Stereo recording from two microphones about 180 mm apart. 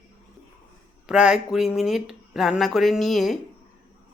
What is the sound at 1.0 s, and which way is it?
A woman's voice, 5° right (ahead or behind).